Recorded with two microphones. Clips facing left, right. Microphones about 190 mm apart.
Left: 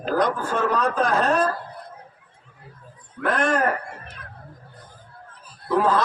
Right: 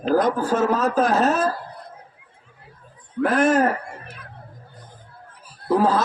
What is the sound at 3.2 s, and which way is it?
Speech, 5° right (ahead or behind).